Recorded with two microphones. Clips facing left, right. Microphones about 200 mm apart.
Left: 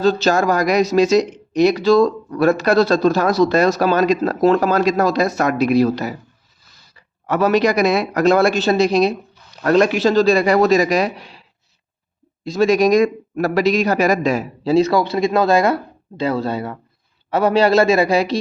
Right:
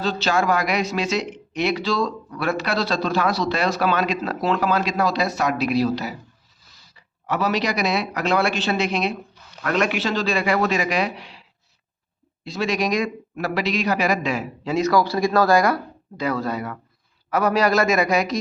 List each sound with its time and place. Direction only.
0.0 s a man's voice: 45° left (ahead or behind)
12.5 s a man's voice: 45° left (ahead or behind)